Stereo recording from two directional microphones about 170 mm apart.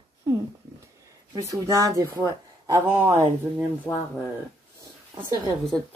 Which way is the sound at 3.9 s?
15° left (ahead or behind).